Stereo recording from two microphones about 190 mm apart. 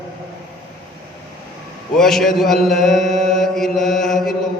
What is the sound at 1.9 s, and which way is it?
Mantra, centre (ahead or behind).